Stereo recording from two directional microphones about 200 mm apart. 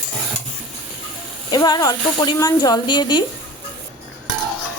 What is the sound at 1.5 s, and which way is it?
A woman's voice, 20° left (ahead or behind).